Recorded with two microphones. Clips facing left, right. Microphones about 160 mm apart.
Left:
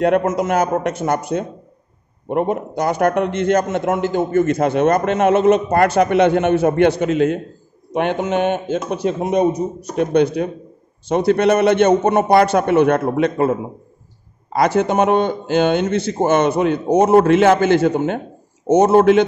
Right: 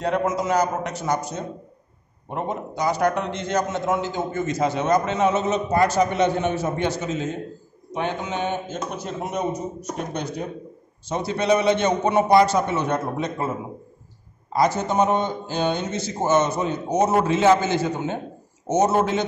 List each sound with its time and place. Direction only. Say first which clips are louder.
0.0 s a man's voice: left 7 dB; 55° left (ahead or behind)